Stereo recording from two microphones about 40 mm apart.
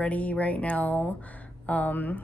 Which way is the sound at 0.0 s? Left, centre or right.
Left.